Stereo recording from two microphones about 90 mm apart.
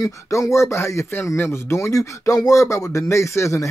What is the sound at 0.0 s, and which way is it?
Speech, 35° left (ahead or behind).